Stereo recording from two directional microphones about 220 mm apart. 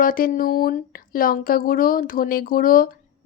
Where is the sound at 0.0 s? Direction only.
40° left (ahead or behind).